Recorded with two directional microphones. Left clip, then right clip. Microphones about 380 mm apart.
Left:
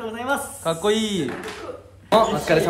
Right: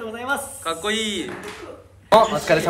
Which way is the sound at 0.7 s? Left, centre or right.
Centre.